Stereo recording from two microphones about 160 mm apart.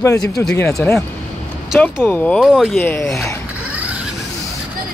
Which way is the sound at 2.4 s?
Centre (ahead or behind).